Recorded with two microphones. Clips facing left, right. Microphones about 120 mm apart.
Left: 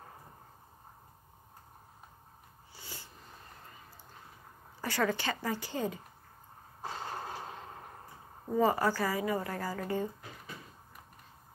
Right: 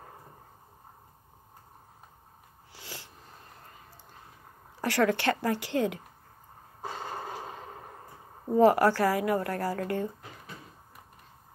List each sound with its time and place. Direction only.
2.7 s wheeze: 90° right
4.7 s a woman's voice: 80° right
8.5 s speech: 80° right